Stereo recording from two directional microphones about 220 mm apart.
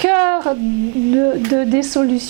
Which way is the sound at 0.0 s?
20° right (ahead or behind).